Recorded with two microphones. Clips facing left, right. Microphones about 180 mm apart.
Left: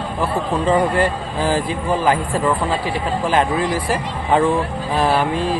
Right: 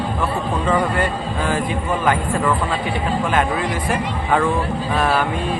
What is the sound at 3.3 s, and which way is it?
A man's voice, 35° left (ahead or behind).